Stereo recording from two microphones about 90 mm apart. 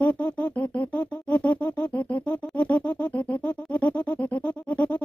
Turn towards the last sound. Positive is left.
turn(degrees=15)  # may be behind; listen again after turning